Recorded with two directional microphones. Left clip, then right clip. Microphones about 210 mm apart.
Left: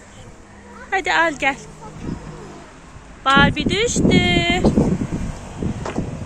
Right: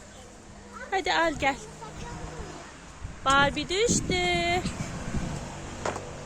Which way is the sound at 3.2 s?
Centre (ahead or behind).